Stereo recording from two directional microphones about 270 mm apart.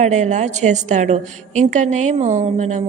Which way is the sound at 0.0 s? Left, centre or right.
Right.